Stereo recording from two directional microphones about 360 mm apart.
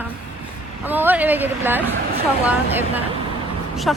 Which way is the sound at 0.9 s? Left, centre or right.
Centre.